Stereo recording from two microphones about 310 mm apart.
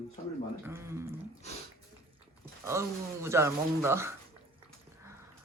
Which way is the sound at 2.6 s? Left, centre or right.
Centre.